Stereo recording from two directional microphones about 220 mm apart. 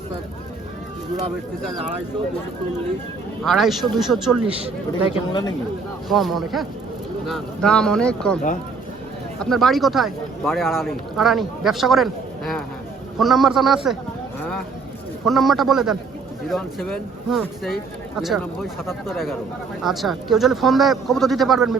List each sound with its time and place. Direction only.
3.4 s speech: centre (ahead or behind)
5.1 s speech: 20° left (ahead or behind)
6.1 s speech: centre (ahead or behind)
9.4 s speech: centre (ahead or behind)
15.3 s speech: centre (ahead or behind)